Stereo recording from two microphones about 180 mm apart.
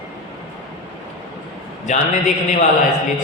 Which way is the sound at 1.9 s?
40° left (ahead or behind).